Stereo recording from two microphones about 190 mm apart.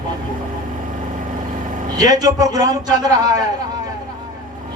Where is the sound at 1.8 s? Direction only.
20° right (ahead or behind).